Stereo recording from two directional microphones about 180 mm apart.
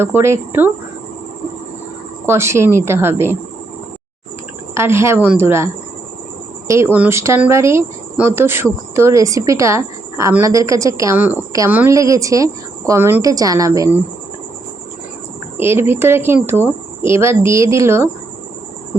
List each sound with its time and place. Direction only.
0.0 s speech: 15° right (ahead or behind)
2.2 s speech: 15° right (ahead or behind)
4.7 s speech: 15° right (ahead or behind)
6.7 s speech: 15° right (ahead or behind)
15.5 s speech: 15° right (ahead or behind)